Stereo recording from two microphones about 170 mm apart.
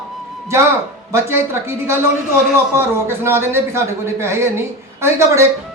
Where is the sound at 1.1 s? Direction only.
15° right (ahead or behind).